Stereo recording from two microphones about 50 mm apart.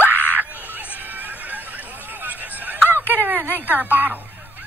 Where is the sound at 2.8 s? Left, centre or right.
Right.